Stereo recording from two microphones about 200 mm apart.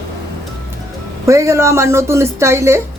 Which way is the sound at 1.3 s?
15° right (ahead or behind).